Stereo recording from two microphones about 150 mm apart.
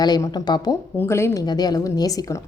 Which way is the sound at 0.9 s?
15° left (ahead or behind).